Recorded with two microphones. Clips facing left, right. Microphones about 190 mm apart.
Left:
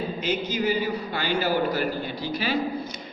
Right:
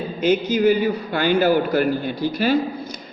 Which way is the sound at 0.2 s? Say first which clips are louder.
Right 11 dB; 50° right (ahead or behind).